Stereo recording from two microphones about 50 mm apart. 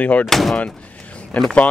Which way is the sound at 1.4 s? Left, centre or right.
Left.